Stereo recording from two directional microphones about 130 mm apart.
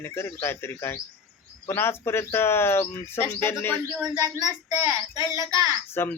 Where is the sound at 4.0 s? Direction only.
25° right (ahead or behind).